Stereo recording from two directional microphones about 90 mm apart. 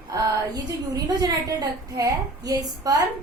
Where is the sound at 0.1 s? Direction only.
45° right (ahead or behind).